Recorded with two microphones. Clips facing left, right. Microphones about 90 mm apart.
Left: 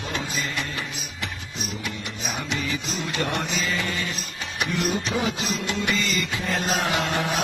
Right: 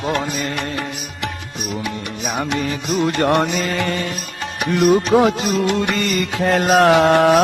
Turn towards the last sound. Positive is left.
turn(degrees=-65)  # may be behind; listen again after turning